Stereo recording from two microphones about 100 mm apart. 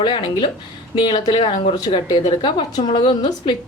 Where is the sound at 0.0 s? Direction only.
50° left (ahead or behind).